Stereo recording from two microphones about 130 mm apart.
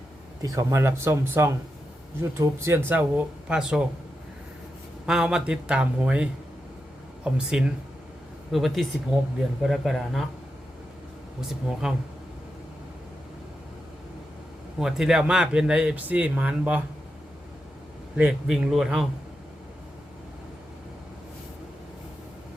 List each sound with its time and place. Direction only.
0.4 s speech: 25° right (ahead or behind); by 3.8 s 5° right (ahead or behind)
5.0 s speech: 5° right (ahead or behind)
7.3 s speech: 5° right (ahead or behind)
11.3 s speech: 5° right (ahead or behind)
14.8 s speech: 5° right (ahead or behind)
18.2 s speech: 5° right (ahead or behind)